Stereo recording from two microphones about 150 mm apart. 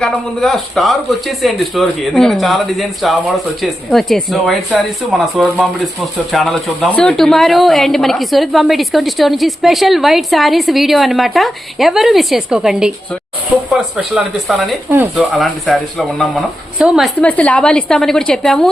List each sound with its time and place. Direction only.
0.0 s speech: centre (ahead or behind)
14.8 s speech: 15° right (ahead or behind)
15.1 s speech: centre (ahead or behind)
17.2 s speech: 10° left (ahead or behind)